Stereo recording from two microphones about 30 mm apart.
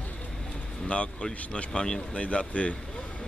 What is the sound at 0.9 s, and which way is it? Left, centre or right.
Speech, left.